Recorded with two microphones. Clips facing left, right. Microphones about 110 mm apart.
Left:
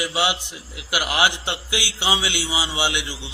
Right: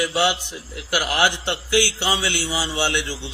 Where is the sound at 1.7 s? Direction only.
45° right (ahead or behind).